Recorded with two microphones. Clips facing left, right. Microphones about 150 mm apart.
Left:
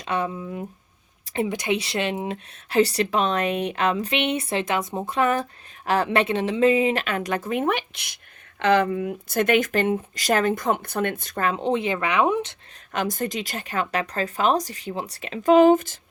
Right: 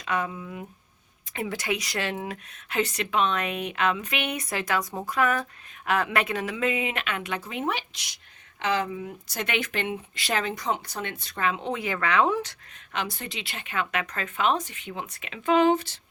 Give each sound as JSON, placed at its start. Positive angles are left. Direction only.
{"t": 0.0, "sound": "speech", "side_deg": 30}
{"t": 12.9, "sound": "speech", "side_deg": 45}